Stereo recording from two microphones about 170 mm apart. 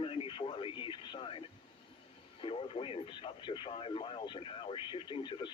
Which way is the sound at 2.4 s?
35° left (ahead or behind).